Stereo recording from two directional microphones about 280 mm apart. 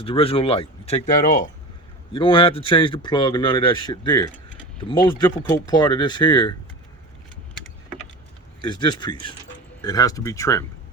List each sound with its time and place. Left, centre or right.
0.0 s speech: centre
8.6 s speech: centre